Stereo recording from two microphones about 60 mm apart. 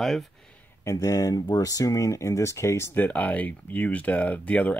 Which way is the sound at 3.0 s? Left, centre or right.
Left.